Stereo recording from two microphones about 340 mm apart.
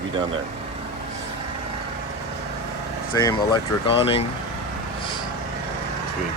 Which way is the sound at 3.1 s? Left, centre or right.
Centre.